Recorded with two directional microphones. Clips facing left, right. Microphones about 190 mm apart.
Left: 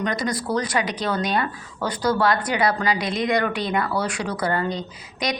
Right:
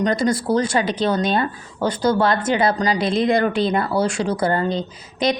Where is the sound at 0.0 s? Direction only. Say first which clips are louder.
Right 6 dB; 30° right (ahead or behind).